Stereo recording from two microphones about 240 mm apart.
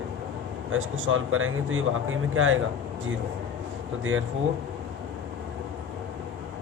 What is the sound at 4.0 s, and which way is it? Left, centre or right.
Speech, right.